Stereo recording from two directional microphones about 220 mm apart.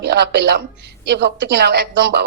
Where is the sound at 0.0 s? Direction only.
50° right (ahead or behind).